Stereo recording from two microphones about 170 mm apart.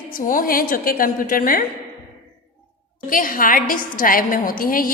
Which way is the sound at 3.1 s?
55° left (ahead or behind).